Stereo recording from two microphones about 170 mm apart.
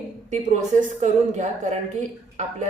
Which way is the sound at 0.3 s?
45° right (ahead or behind).